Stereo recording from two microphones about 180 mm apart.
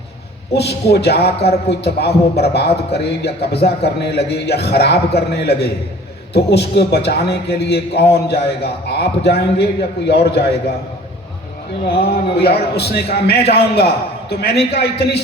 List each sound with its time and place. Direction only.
0.5 s a man's voice: 65° left (ahead or behind)
11.9 s a man's voice: 60° left (ahead or behind)